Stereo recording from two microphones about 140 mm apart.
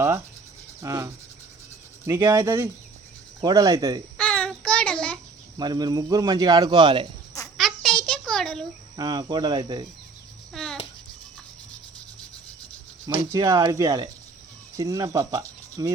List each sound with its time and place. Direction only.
0.8 s speech: 20° right (ahead or behind)
4.2 s child singing: 5° left (ahead or behind)
5.5 s speech: 30° right (ahead or behind)
7.5 s a sound: centre (ahead or behind)
9.0 s speech: 30° right (ahead or behind)
10.5 s a sound: centre (ahead or behind)
13.3 s speech: 25° right (ahead or behind)